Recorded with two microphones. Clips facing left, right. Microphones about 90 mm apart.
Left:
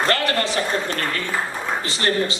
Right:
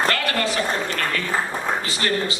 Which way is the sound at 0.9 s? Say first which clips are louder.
Right 1 dB; 40° left (ahead or behind).